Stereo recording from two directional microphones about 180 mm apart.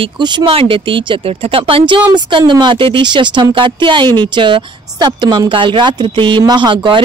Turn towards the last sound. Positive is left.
turn(degrees=-25)  # may be behind; listen again after turning